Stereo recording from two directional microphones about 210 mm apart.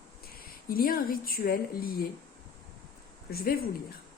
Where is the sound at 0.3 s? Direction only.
45° left (ahead or behind).